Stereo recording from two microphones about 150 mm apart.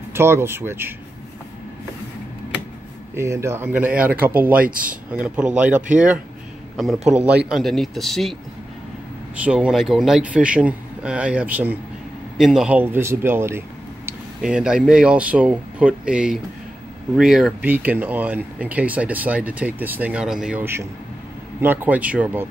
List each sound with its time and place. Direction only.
0.1 s speech: 15° right (ahead or behind)
3.2 s speech: 20° right (ahead or behind)
4.6 s speech: 65° right (ahead or behind)
5.6 s speech: 10° right (ahead or behind)
9.4 s speech: 10° right (ahead or behind)
14.4 s speech: 5° right (ahead or behind)